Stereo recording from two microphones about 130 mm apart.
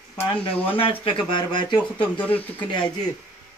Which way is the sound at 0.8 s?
45° left (ahead or behind).